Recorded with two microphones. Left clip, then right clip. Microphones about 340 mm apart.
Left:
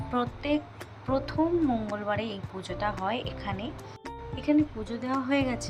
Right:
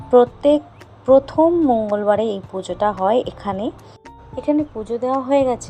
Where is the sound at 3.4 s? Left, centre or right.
Right.